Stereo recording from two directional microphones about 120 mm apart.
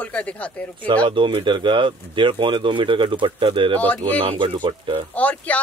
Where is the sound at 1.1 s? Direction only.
45° right (ahead or behind).